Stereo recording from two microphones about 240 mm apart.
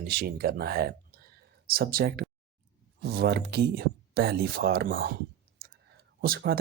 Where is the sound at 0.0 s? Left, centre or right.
Right.